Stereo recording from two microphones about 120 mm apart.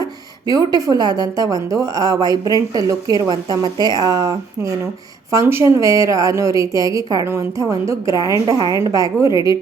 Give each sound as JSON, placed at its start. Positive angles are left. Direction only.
{"t": 0.0, "sound": "a woman's voice", "side_deg": -30}